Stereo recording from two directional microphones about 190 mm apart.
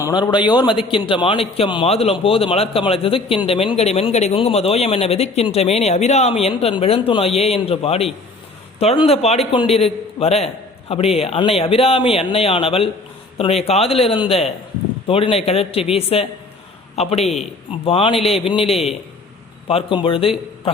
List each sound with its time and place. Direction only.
0.0 s a man's voice: 20° left (ahead or behind)